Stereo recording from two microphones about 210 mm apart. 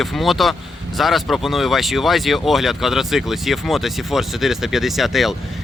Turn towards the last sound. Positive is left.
turn(degrees=0)  # may be behind; listen again after turning